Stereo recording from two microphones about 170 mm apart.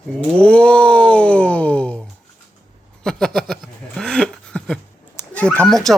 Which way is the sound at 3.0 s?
5° left (ahead or behind).